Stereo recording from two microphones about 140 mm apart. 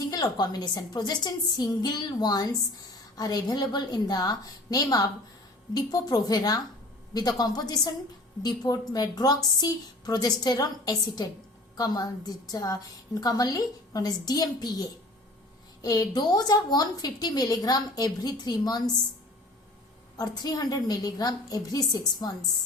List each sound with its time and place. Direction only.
0.1 s a woman's voice: 30° left (ahead or behind)
20.1 s a woman's voice: 30° left (ahead or behind)